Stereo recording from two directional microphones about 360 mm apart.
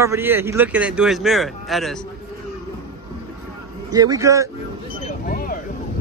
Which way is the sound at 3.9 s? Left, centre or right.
Centre.